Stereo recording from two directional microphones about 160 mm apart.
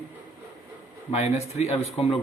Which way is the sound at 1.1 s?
45° left (ahead or behind).